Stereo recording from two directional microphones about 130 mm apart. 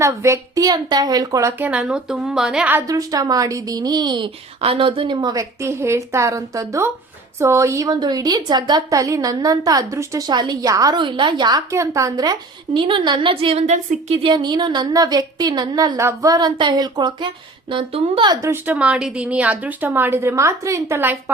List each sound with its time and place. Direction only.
0.0 s a woman's voice: 20° right (ahead or behind); by 2.7 s 5° right (ahead or behind)
2.8 s a woman's voice: 25° right (ahead or behind); by 18.3 s 50° right (ahead or behind)
18.5 s speech: 15° right (ahead or behind)